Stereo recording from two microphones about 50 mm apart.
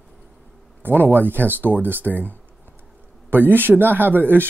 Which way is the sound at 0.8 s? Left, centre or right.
Right.